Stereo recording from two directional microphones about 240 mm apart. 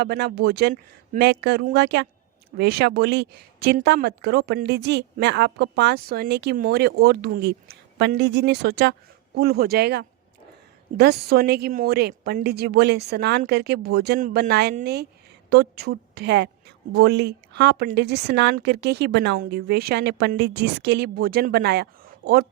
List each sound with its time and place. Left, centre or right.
0.0 s a woman's voice: right